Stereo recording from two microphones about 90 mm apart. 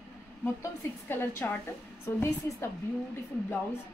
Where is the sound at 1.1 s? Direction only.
25° left (ahead or behind).